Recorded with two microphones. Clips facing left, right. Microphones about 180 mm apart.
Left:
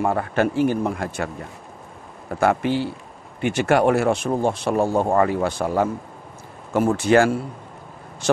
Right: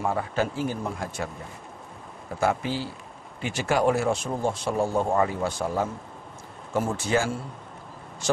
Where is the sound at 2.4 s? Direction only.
65° left (ahead or behind).